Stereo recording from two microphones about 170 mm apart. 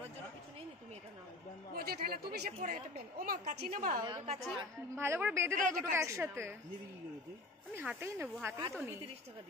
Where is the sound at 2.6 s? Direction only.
55° right (ahead or behind).